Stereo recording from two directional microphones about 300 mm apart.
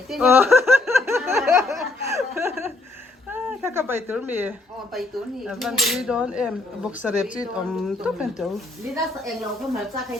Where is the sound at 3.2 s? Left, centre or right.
Centre.